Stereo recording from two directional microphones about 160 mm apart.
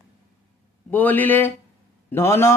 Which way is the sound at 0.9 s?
10° left (ahead or behind).